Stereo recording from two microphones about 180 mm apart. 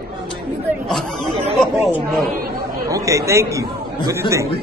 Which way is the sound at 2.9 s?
20° right (ahead or behind).